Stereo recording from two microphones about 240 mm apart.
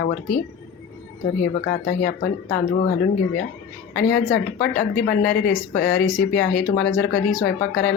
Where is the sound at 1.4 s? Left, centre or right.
Left.